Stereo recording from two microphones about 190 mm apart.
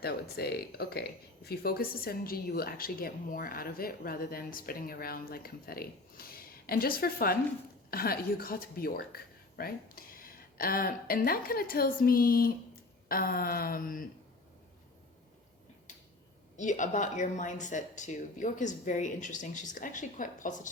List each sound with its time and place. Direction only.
0.0 s a woman's voice: 55° left (ahead or behind)
16.6 s speech: 40° left (ahead or behind)